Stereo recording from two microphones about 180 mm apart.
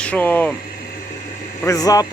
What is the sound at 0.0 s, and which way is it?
Speech, 10° left (ahead or behind).